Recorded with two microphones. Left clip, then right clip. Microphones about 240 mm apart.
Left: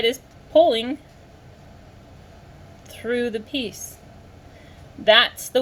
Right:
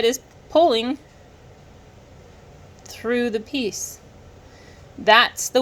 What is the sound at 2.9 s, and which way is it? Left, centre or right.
Speech, right.